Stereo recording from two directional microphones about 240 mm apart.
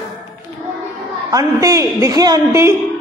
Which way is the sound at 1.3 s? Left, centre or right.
Centre.